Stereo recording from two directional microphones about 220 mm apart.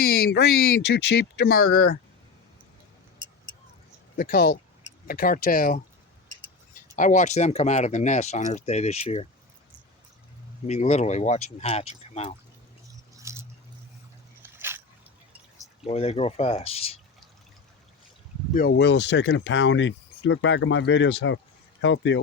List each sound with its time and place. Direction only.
0.0 s speech: 45° left (ahead or behind)
4.2 s speech: 40° left (ahead or behind)
6.9 s speech: 35° left (ahead or behind)
10.7 s speech: 30° left (ahead or behind)
13.1 s a sound: 15° right (ahead or behind)
14.5 s a sound: 10° right (ahead or behind)
15.8 s speech: 25° left (ahead or behind)
18.5 s speech: 45° left (ahead or behind)